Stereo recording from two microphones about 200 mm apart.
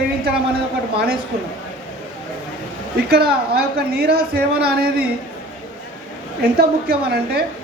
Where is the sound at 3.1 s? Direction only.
50° right (ahead or behind).